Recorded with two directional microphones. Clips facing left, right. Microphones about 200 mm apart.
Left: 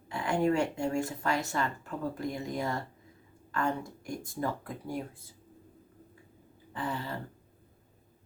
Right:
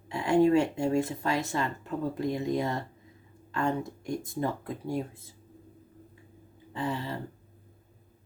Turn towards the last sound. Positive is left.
turn(degrees=-25)  # may be behind; listen again after turning